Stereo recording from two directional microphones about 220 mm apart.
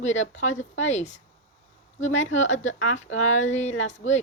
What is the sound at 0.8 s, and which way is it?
Speech, 30° left (ahead or behind).